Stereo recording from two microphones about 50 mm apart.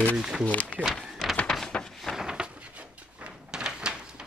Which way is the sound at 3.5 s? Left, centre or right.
Centre.